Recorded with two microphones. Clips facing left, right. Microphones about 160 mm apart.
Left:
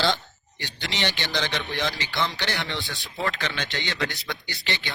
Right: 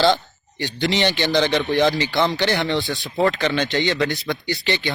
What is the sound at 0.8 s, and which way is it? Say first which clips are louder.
Speech: right 9 dB; 35° right (ahead or behind).